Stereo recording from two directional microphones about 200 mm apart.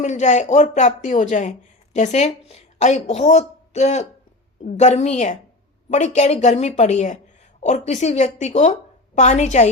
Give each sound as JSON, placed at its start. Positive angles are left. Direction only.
{"t": 0.0, "sound": "speech", "side_deg": 35}